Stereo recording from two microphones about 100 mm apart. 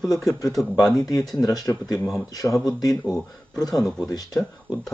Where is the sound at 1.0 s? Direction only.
35° left (ahead or behind).